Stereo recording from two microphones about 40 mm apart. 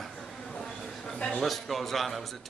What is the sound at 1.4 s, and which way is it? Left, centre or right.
Speech, centre.